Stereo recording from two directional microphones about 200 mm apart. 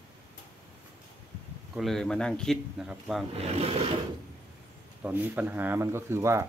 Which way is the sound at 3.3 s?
30° right (ahead or behind).